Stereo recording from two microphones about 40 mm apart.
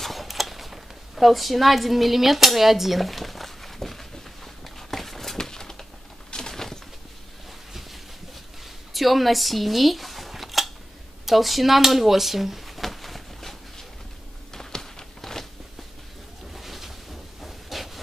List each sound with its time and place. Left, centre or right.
0.0 s a sound: centre
6.3 s bird: centre
8.9 s scissors: centre
11.2 s a sound: centre
16.5 s boat: centre
17.4 s rub: centre